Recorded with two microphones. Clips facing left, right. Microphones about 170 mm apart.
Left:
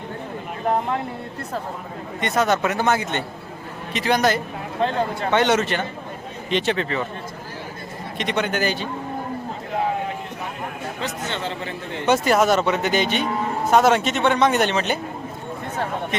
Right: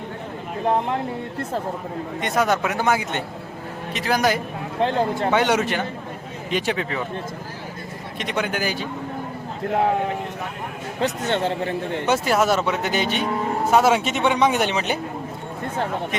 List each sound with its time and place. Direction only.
2.2 s a man's voice: 10° right (ahead or behind)
8.2 s a man's voice: 5° right (ahead or behind)
11.0 s speech: 55° right (ahead or behind)
12.0 s a man's voice: 5° right (ahead or behind)